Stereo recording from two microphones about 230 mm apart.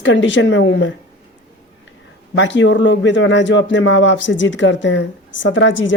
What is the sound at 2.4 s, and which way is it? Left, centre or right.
Speech, left.